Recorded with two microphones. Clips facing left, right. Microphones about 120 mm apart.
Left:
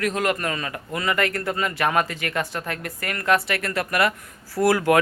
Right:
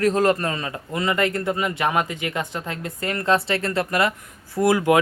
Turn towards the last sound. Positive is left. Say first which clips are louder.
# right 1 dB
turn(degrees=-20)  # may be behind; listen again after turning